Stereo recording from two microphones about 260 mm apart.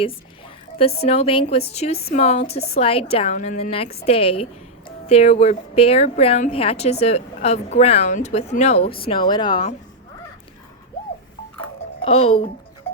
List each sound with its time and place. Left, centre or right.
0.8 s speech: left
9.0 s speech: centre
12.0 s speech: left